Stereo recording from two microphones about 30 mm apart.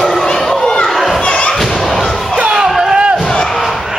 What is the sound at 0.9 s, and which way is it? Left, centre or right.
Children playing, centre.